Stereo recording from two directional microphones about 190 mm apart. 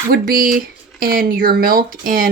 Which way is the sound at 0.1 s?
50° right (ahead or behind).